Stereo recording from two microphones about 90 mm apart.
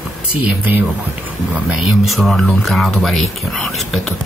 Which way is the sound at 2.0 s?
Centre (ahead or behind).